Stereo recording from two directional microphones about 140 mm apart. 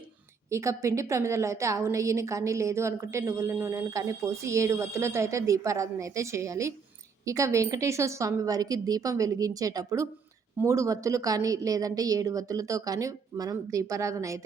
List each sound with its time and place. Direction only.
0.5 s a woman's voice: 20° right (ahead or behind)